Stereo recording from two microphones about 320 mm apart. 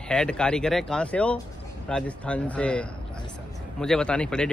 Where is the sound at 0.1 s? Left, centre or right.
Centre.